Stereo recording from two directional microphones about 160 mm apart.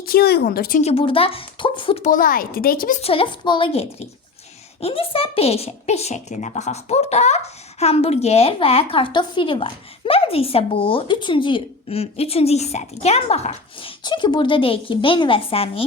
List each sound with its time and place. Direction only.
0.0 s a woman's voice: 75° left (ahead or behind)
0.8 s a woman's voice: 40° left (ahead or behind)
2.0 s speech: 55° left (ahead or behind)
3.0 s a woman's voice: 35° left (ahead or behind)
14.0 s a woman's voice: 30° left (ahead or behind)